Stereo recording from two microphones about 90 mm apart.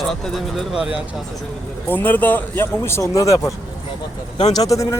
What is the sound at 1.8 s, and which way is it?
Speech, 20° left (ahead or behind).